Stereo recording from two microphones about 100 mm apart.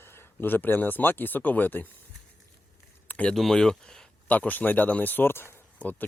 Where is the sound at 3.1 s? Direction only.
15° left (ahead or behind).